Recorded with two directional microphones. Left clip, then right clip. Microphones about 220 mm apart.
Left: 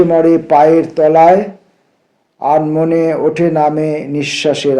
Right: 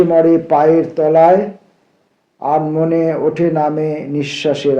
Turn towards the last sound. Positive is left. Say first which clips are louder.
# left 2 dB
turn(degrees=40)  # may be behind; listen again after turning